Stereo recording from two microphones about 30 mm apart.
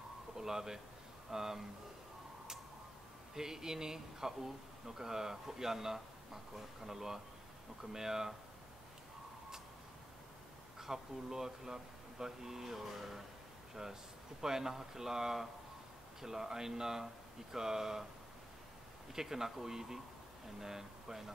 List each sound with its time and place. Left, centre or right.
0.4 s speech: centre
3.3 s speech: centre
10.8 s speech: centre
14.4 s speech: centre
19.1 s speech: centre